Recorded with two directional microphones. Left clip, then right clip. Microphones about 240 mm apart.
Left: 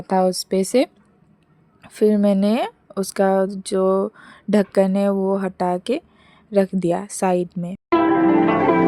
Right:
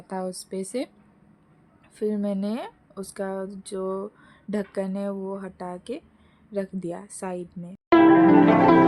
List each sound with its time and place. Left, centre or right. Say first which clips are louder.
0.1 s speech: left 13 dB; left
7.9 s zither: right 1 dB; centre